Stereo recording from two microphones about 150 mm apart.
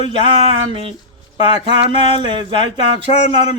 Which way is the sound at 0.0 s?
35° right (ahead or behind).